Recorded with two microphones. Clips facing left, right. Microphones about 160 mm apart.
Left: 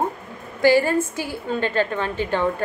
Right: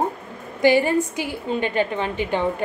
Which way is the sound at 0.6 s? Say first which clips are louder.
Even; 20° right (ahead or behind).